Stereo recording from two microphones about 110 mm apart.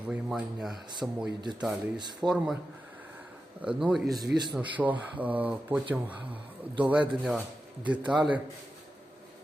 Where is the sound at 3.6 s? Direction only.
10° right (ahead or behind).